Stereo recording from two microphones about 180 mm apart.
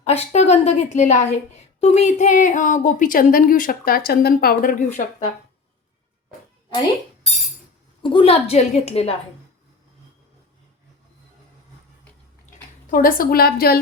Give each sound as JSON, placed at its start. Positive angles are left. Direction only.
{"t": 0.0, "sound": "a woman's voice", "side_deg": 40}
{"t": 8.0, "sound": "a woman's voice", "side_deg": 30}
{"t": 12.9, "sound": "a woman's voice", "side_deg": 50}